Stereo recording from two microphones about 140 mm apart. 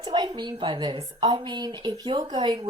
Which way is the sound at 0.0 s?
35° right (ahead or behind).